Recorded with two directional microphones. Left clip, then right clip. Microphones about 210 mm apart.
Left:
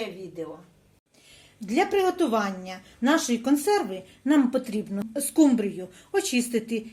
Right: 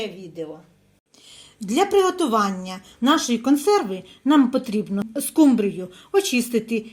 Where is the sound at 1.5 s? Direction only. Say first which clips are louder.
Right 5 dB; 40° right (ahead or behind).